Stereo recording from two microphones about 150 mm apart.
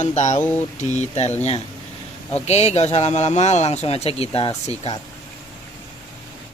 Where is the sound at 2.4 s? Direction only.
45° left (ahead or behind).